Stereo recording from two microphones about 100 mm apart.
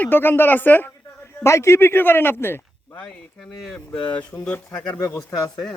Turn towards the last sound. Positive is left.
turn(degrees=35)  # may be behind; listen again after turning